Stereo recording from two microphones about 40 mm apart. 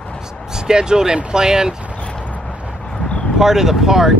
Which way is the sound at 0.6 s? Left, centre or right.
Centre.